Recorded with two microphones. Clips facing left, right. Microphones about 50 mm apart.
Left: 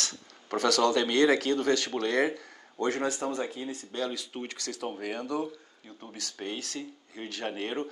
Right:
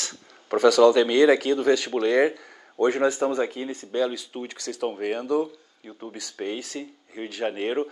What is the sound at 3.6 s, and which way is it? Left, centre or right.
Speech, right.